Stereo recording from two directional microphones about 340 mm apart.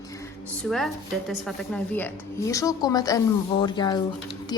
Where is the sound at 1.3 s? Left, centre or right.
Centre.